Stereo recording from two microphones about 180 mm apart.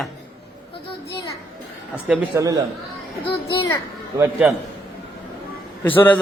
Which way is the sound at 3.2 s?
25° left (ahead or behind).